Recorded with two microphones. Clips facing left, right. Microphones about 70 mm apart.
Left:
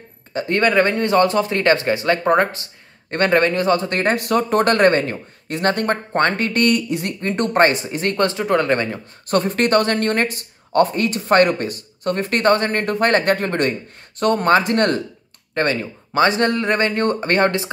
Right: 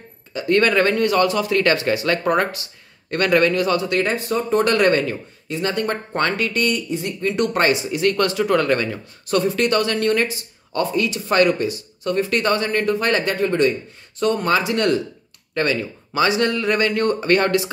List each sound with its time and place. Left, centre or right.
0.5 s speech: left
4.1 s speech: left
4.7 s speech: left
5.5 s speech: left
6.6 s speech: left
9.3 s speech: left
15.5 s speech: left